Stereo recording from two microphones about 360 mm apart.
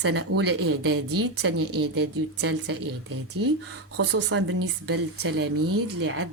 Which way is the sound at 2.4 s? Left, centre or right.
Right.